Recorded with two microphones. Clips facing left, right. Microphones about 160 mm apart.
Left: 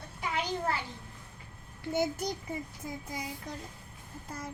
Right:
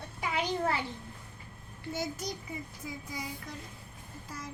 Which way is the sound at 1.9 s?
60° left (ahead or behind).